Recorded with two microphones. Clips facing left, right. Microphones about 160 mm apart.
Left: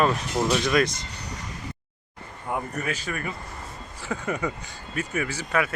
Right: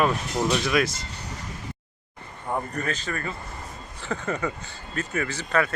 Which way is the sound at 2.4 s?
5° left (ahead or behind).